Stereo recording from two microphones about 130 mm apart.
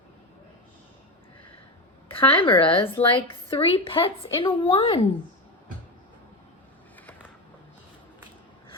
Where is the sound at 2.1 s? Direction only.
45° left (ahead or behind).